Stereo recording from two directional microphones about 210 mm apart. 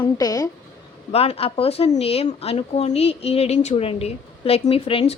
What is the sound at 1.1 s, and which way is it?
Speech, 30° left (ahead or behind).